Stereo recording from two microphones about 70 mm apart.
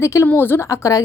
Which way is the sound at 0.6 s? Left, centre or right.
Left.